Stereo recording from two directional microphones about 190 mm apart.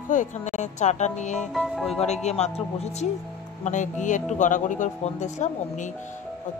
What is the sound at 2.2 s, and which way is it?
Speech, 35° left (ahead or behind).